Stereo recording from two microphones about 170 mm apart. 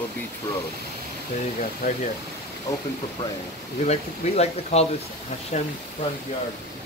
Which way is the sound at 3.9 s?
40° left (ahead or behind).